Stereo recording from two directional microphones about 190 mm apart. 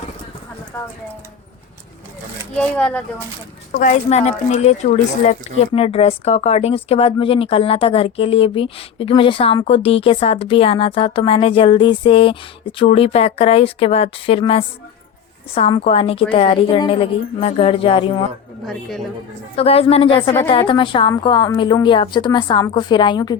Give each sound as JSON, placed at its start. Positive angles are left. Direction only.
{"t": 0.7, "sound": "speech", "side_deg": 10}
{"t": 2.7, "sound": "speech", "side_deg": 5}
{"t": 3.7, "sound": "speech", "side_deg": 45}
{"t": 18.6, "sound": "a woman's voice", "side_deg": 0}
{"t": 19.5, "sound": "speech", "side_deg": 30}